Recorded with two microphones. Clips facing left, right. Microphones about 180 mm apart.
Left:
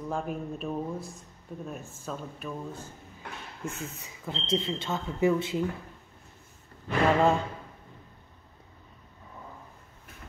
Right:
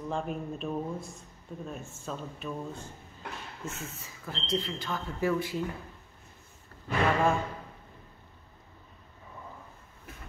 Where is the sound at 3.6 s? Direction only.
20° left (ahead or behind).